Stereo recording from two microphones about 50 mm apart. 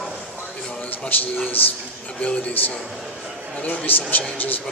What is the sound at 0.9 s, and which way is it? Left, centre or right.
Speech, left.